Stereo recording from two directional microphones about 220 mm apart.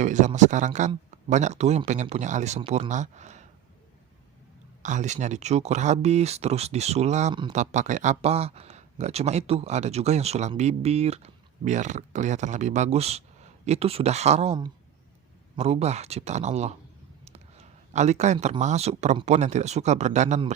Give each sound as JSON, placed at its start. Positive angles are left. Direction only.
{"t": 0.0, "sound": "speech", "side_deg": -35}
{"t": 4.8, "sound": "speech", "side_deg": -35}